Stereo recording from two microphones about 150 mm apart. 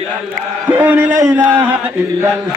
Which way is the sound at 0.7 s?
10° right (ahead or behind).